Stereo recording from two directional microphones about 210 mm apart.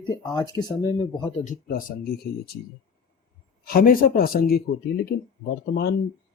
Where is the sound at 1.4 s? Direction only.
40° left (ahead or behind).